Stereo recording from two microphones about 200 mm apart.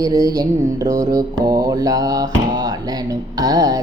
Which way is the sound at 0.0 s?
20° right (ahead or behind).